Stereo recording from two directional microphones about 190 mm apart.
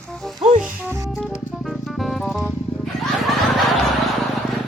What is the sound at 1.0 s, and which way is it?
Music, centre (ahead or behind).